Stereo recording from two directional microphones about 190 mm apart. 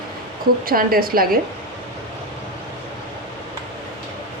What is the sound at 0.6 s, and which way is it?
Speech, 50° right (ahead or behind).